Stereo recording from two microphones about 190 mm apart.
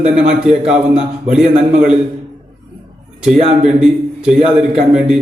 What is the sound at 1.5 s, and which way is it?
Speech, 35° right (ahead or behind).